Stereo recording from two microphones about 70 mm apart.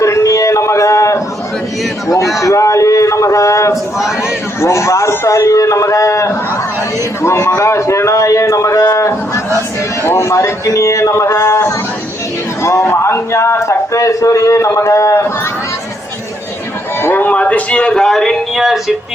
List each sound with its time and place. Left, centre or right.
0.0 s a sound: left
2.4 s a man's voice: left
10.0 s a man's voice: left
17.0 s speech: left; by 18.9 s centre